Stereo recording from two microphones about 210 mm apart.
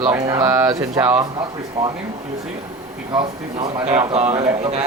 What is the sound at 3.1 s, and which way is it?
Speech, 20° right (ahead or behind).